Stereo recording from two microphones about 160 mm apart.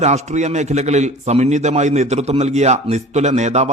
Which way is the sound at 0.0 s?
45° right (ahead or behind).